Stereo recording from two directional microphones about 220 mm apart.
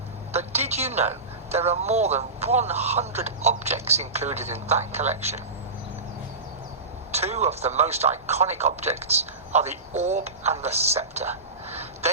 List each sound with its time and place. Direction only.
0.3 s a woman's voice: 30° right (ahead or behind)
7.1 s a woman's voice: 30° right (ahead or behind)